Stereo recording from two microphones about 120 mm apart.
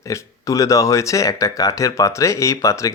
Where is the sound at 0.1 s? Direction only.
30° left (ahead or behind).